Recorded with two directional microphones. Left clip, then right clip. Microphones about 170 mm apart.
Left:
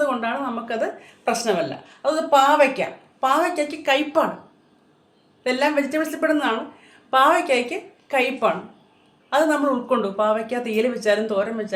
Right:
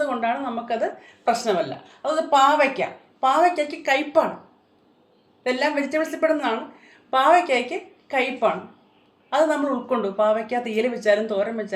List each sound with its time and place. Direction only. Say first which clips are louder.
0.0 s a woman's voice: left 1 dB; 10° left (ahead or behind)
5.4 s a woman's voice: left 2 dB; 15° left (ahead or behind)